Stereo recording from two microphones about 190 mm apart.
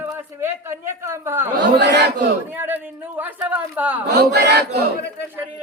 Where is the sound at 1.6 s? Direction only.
65° right (ahead or behind).